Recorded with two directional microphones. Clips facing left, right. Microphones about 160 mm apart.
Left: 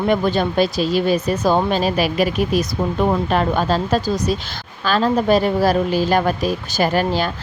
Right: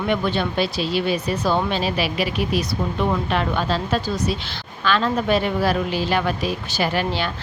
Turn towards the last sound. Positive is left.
turn(degrees=40)  # may be behind; listen again after turning